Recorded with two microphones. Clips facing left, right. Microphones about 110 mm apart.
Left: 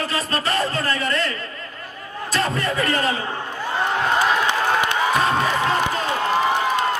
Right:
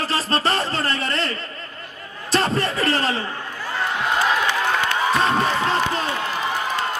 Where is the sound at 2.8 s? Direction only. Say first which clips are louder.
Left 2 dB; 30° right (ahead or behind).